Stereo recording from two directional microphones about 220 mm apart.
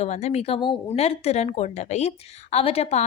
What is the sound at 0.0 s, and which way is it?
A woman's voice, 30° left (ahead or behind).